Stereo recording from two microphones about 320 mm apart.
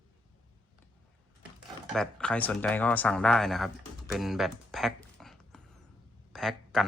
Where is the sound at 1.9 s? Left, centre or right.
Centre.